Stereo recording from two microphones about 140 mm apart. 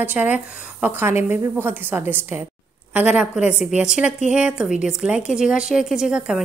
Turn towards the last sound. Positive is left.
turn(degrees=-5)  # may be behind; listen again after turning